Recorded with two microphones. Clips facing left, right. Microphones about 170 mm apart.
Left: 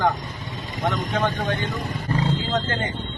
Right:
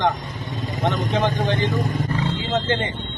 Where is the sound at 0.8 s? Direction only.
25° right (ahead or behind).